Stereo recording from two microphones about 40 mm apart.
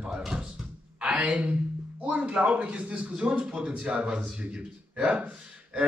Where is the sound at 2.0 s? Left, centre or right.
Right.